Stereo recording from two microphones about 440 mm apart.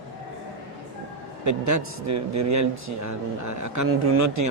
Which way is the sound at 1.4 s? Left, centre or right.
Right.